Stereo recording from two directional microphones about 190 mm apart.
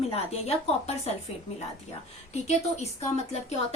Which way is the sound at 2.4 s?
35° left (ahead or behind).